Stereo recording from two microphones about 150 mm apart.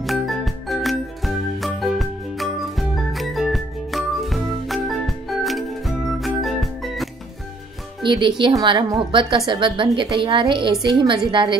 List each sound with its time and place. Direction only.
0.0 s music: centre (ahead or behind)
8.0 s a woman's voice: 35° right (ahead or behind)